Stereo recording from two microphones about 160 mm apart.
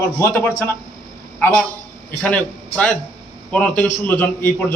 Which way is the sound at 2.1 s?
5° left (ahead or behind).